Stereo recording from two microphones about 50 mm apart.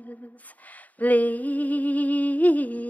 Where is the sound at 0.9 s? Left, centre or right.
Left.